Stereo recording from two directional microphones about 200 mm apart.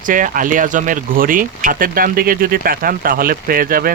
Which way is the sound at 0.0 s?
40° right (ahead or behind).